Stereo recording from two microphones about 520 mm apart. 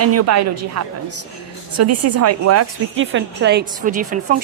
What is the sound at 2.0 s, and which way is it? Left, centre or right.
A woman's voice, right.